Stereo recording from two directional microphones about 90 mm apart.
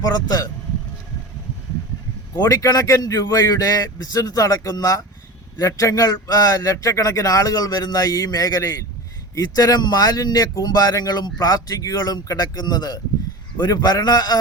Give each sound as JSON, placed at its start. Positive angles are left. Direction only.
{"t": 0.3, "sound": "speech", "side_deg": 45}
{"t": 2.5, "sound": "speech", "side_deg": 40}